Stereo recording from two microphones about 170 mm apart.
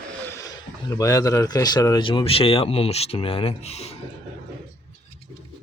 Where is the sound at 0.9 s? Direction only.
20° left (ahead or behind); by 3.9 s 40° left (ahead or behind).